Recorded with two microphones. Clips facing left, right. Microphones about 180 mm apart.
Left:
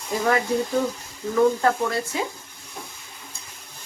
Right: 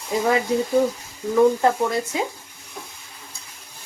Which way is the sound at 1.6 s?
20° right (ahead or behind).